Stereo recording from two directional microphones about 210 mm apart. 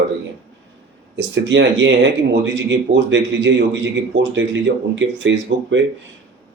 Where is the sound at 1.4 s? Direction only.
60° right (ahead or behind).